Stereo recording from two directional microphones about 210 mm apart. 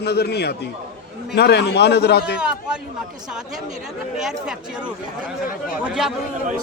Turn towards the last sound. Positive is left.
turn(degrees=-5)  # may be behind; listen again after turning